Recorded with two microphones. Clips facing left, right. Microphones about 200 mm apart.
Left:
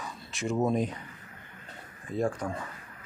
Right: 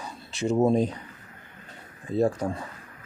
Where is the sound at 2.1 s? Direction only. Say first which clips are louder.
Right 6 dB; 35° right (ahead or behind).